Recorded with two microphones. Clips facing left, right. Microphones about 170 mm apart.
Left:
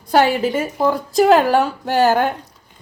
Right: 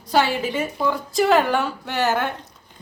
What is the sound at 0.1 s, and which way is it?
A woman's voice, 50° left (ahead or behind).